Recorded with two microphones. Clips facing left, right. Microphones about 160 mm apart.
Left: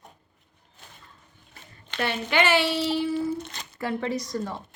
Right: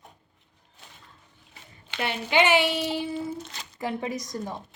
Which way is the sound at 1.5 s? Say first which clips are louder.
Even; 15° right (ahead or behind).